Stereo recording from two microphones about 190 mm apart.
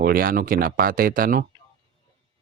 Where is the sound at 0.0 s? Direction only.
50° right (ahead or behind).